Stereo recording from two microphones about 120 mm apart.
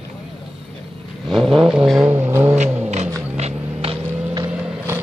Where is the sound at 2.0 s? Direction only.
20° right (ahead or behind).